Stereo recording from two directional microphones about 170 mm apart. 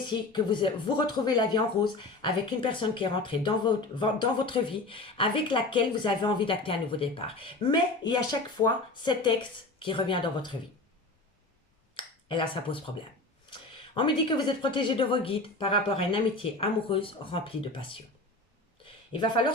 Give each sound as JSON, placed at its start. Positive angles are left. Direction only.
{"t": 0.1, "sound": "speech", "side_deg": 25}
{"t": 11.9, "sound": "finger snapping", "side_deg": 30}
{"t": 13.5, "sound": "speech", "side_deg": 30}
{"t": 19.1, "sound": "speech", "side_deg": 30}